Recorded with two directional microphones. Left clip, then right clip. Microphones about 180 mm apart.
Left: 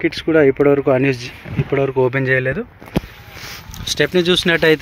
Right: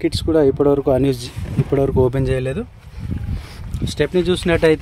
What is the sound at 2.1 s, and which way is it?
Speech, 15° right (ahead or behind).